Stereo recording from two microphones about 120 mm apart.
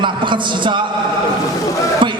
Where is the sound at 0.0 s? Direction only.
40° right (ahead or behind).